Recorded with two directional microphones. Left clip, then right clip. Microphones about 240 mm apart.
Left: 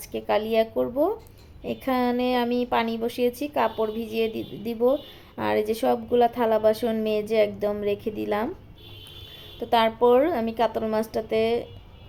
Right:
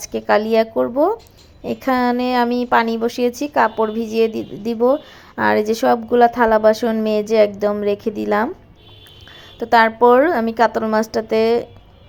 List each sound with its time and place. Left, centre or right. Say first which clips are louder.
0.0 s a woman's voice: right 8 dB; centre
9.6 s a woman's voice: right 8 dB; centre